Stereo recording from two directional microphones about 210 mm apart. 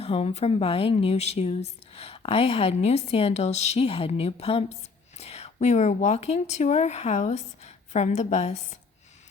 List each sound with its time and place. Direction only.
0.0 s a woman's voice: 30° left (ahead or behind)